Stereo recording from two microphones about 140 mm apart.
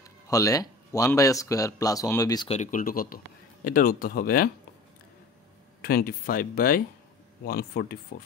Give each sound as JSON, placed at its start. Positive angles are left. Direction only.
{"t": 0.3, "sound": "speech", "side_deg": 25}
{"t": 2.5, "sound": "speech", "side_deg": 65}
{"t": 5.8, "sound": "speech", "side_deg": 90}